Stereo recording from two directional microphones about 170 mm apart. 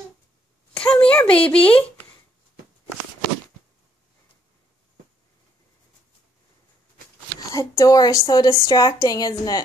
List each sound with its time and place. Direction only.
0.7 s a sound: 10° left (ahead or behind)
1.5 s speech: 5° left (ahead or behind)
7.3 s a woman's voice: 20° left (ahead or behind)